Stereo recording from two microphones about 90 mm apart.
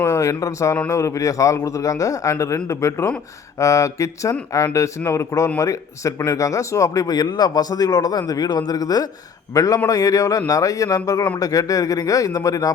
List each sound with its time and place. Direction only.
0.0 s speech: 35° left (ahead or behind)
7.2 s speech: 50° left (ahead or behind)